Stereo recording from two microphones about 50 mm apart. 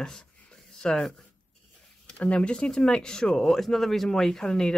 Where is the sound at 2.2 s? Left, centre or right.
Left.